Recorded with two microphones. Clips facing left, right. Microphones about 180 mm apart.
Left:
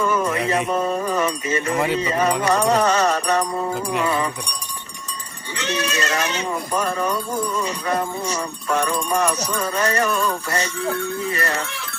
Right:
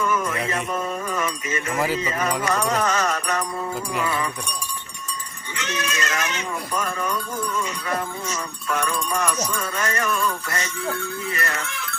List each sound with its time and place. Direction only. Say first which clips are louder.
0.0 s speech: left 3 dB; 35° left (ahead or behind)
5.5 s speech: left 4 dB; 35° left (ahead or behind)